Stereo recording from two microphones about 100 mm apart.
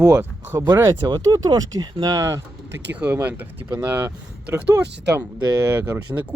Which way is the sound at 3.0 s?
15° right (ahead or behind).